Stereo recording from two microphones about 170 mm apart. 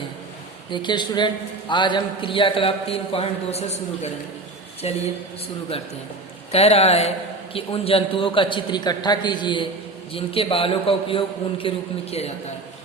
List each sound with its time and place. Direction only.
0.7 s a man's voice: 25° left (ahead or behind)
6.5 s a man's voice: 35° left (ahead or behind)